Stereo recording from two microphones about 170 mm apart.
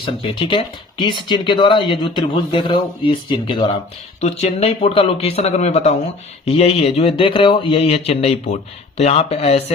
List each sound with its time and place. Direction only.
0.0 s speech: 30° left (ahead or behind)
4.2 s speech: 40° left (ahead or behind)